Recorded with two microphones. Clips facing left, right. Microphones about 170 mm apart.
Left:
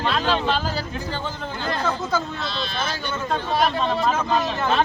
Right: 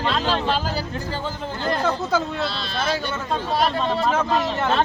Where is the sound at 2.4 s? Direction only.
35° right (ahead or behind).